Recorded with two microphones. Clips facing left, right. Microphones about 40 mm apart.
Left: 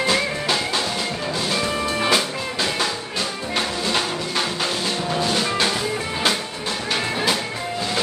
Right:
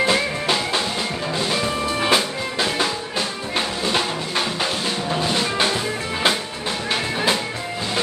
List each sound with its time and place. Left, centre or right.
0.0 s music: centre
1.5 s music: centre
2.0 s music: centre